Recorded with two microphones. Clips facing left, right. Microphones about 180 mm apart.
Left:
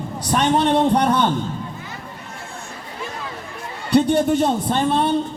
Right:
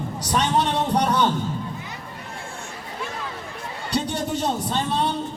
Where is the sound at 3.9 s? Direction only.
55° left (ahead or behind).